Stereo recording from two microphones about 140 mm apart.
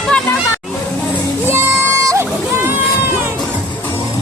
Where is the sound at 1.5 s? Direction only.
20° right (ahead or behind).